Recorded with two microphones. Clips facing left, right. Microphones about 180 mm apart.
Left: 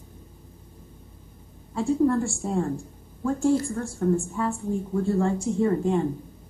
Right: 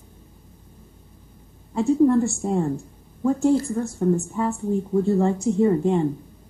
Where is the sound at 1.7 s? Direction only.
20° right (ahead or behind).